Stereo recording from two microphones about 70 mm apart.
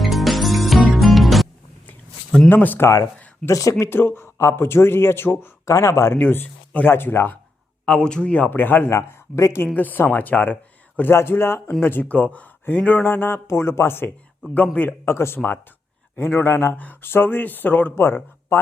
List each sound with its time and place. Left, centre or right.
0.0 s music: centre
2.5 s speech: left
3.4 s speech: left
3.8 s speech: left
5.6 s speech: left
6.1 s speech: left
7.9 s speech: centre
8.4 s speech: left
8.9 s speech: left
9.7 s speech: left
11.1 s speech: left
16.7 s speech: left